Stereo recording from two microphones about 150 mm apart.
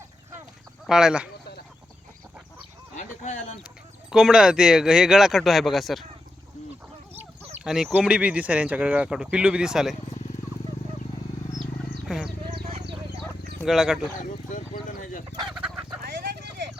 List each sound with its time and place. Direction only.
0.9 s speech: 5° right (ahead or behind)
2.9 s a sound: 55° left (ahead or behind)
4.1 s speech: 5° right (ahead or behind)
7.1 s fowl: 45° right (ahead or behind)
7.6 s speech: 5° right (ahead or behind)
11.6 s wild animals: centre (ahead or behind)
13.7 s speech: centre (ahead or behind)
14.2 s speech: 55° left (ahead or behind)
15.5 s chicken: 10° right (ahead or behind)
16.0 s clip-clop: 90° right